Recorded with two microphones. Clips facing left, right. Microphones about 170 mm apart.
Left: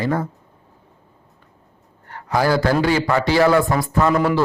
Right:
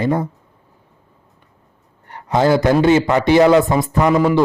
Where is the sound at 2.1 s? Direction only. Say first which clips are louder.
Right 4 dB; 20° right (ahead or behind).